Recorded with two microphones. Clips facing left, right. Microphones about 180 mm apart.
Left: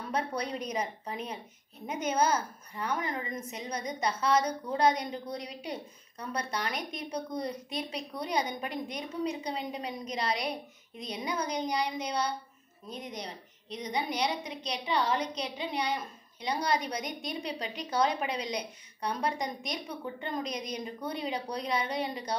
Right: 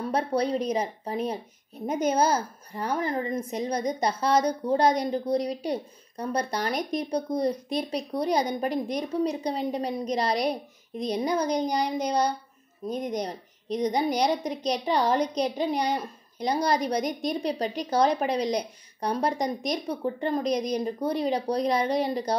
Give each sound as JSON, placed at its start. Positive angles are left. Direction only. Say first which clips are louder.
{"t": 0.1, "sound": "a woman's voice", "louder": "right 7 dB", "side_deg": -30}